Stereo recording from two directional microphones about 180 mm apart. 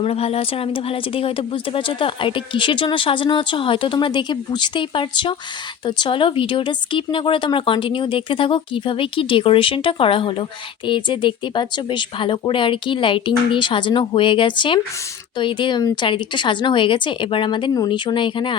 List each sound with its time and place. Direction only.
0.0 s a woman's voice: 35° left (ahead or behind)